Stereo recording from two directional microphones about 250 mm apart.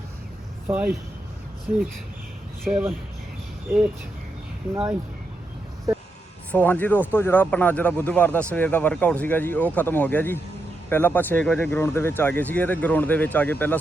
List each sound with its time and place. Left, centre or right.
0.7 s speech: centre
2.6 s speech: centre
4.7 s speech: centre
6.5 s speech: centre